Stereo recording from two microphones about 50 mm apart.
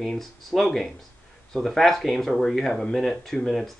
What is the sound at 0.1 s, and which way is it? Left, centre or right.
Speech, centre.